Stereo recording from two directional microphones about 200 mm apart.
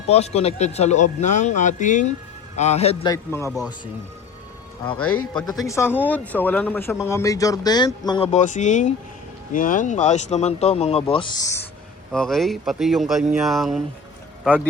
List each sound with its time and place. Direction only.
0.1 s speech: 30° left (ahead or behind)
3.1 s speech: 15° left (ahead or behind)
5.0 s speech: 90° left
5.6 s speech: 15° left (ahead or behind)
8.3 s speech: 35° left (ahead or behind); by 11.6 s 15° left (ahead or behind)
12.1 s speech: centre (ahead or behind)